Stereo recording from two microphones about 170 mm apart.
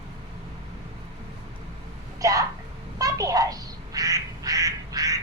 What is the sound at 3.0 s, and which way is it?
Quack, 20° right (ahead or behind).